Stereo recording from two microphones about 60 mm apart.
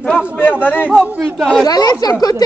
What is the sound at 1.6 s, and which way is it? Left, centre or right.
Speech, left.